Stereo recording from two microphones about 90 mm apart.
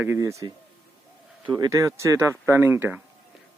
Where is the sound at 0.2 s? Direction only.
35° right (ahead or behind).